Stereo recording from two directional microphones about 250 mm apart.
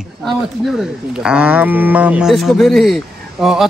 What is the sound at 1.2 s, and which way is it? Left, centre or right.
Speech, centre.